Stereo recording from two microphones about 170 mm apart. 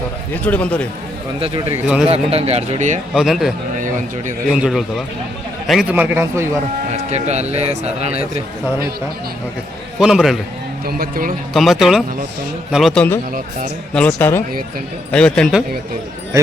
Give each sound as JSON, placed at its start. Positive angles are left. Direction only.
{"t": 0.4, "sound": "speech", "side_deg": 10}
{"t": 2.0, "sound": "speech", "side_deg": -35}
{"t": 3.2, "sound": "speech", "side_deg": 0}
{"t": 4.5, "sound": "a man's voice", "side_deg": 0}
{"t": 6.9, "sound": "speech", "side_deg": -40}
{"t": 10.0, "sound": "speech", "side_deg": -5}
{"t": 10.8, "sound": "speech", "side_deg": -60}
{"t": 11.5, "sound": "speech", "side_deg": 0}